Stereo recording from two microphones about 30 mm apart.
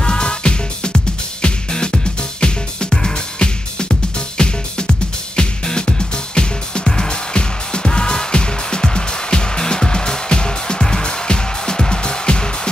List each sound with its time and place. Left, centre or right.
0.0 s music: left